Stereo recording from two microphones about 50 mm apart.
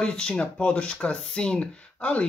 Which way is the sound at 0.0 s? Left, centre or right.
Centre.